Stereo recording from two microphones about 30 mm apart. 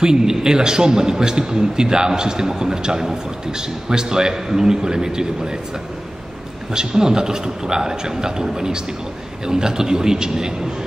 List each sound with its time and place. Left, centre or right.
0.0 s a man's voice: right
6.7 s a man's voice: right